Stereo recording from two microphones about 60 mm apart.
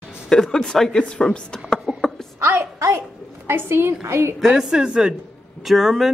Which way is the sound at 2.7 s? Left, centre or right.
Right.